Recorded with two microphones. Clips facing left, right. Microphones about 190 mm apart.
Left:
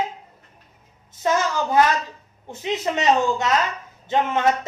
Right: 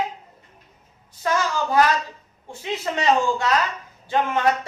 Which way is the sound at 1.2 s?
20° left (ahead or behind).